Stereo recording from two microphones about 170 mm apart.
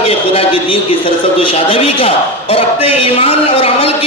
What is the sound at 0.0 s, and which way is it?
A man's voice, 35° left (ahead or behind).